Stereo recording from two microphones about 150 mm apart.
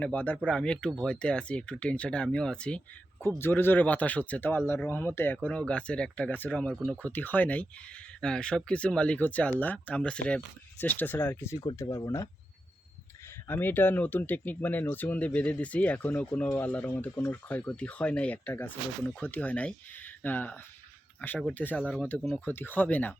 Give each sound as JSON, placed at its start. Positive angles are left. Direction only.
{"t": 0.0, "sound": "speech", "side_deg": 10}
{"t": 13.5, "sound": "speech", "side_deg": 15}